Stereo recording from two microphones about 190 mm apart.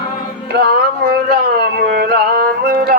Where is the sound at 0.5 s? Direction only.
55° right (ahead or behind).